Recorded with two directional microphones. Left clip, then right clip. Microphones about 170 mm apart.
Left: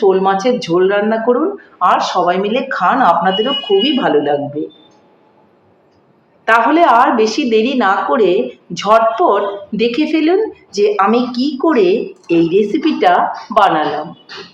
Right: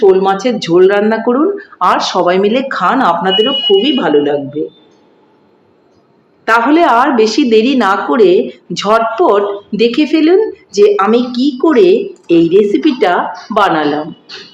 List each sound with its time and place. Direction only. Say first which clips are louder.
0.0 s a woman's voice: right 3 dB; 20° right (ahead or behind)
6.4 s a woman's voice: right 1 dB; 25° right (ahead or behind)